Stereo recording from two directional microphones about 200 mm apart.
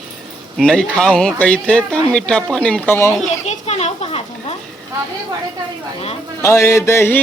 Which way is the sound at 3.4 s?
35° left (ahead or behind).